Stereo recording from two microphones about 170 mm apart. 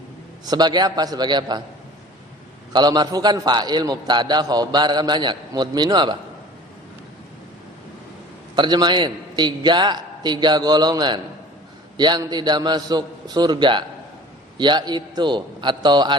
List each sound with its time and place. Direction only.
0.4 s a man's voice: 25° right (ahead or behind)
2.7 s a man's voice: 25° right (ahead or behind)
8.5 s a man's voice: 25° right (ahead or behind)